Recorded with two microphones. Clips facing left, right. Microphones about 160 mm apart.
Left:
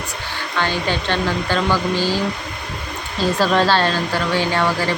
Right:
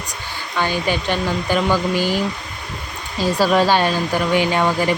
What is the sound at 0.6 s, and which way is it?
Speech, 10° right (ahead or behind).